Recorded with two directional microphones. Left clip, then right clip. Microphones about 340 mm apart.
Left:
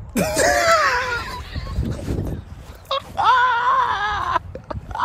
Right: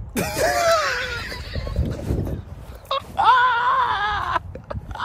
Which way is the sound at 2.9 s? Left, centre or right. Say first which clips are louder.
Even; centre.